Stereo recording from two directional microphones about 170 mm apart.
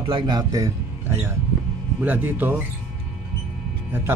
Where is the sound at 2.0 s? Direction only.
10° right (ahead or behind).